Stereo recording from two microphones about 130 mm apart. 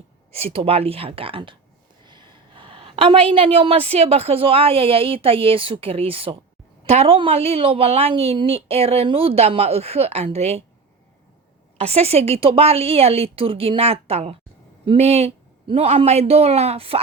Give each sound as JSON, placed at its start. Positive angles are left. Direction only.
{"t": 0.3, "sound": "a woman's voice", "side_deg": -50}
{"t": 2.0, "sound": "a sound", "side_deg": -40}
{"t": 3.3, "sound": "a woman's voice", "side_deg": -45}
{"t": 11.8, "sound": "a woman's voice", "side_deg": -50}